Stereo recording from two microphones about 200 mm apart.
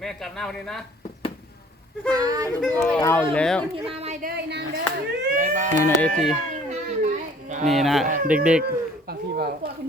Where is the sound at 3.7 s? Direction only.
30° right (ahead or behind).